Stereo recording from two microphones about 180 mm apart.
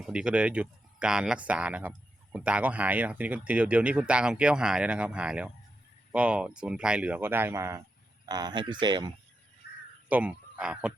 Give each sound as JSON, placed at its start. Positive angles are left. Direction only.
{"t": 0.0, "sound": "speech", "side_deg": -5}
{"t": 10.1, "sound": "speech", "side_deg": -10}